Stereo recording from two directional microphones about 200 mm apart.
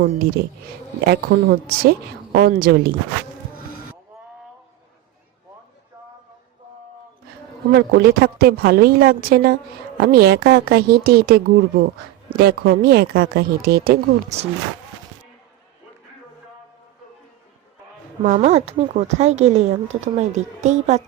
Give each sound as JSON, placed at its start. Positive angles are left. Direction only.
{"t": 0.4, "sound": "a woman's voice", "side_deg": -50}
{"t": 7.7, "sound": "a woman's voice", "side_deg": -55}
{"t": 14.3, "sound": "a woman's voice", "side_deg": -30}
{"t": 18.2, "sound": "a woman's voice", "side_deg": -35}